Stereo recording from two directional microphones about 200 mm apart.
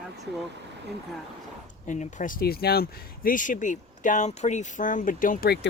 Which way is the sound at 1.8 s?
35° left (ahead or behind).